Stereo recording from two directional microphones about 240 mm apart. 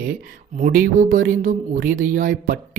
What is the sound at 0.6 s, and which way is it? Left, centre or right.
Speech, right.